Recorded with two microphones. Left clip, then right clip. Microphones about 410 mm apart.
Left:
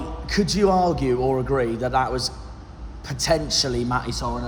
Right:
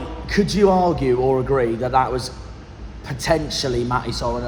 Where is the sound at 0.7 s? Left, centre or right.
Right.